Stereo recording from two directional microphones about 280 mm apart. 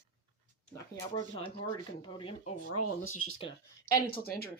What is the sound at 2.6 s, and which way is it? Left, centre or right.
Speech, left.